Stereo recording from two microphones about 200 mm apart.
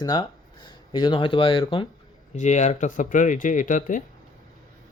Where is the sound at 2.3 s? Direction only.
35° left (ahead or behind).